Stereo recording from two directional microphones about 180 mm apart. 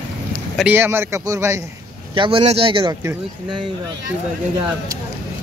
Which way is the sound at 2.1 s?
30° right (ahead or behind).